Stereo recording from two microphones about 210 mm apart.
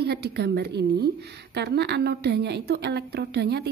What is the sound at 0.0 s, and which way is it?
Speech, 50° right (ahead or behind).